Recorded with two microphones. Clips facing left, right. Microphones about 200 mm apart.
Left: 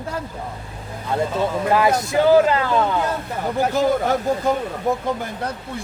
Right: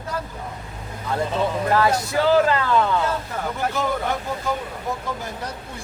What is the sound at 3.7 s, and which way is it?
Speech, 40° left (ahead or behind).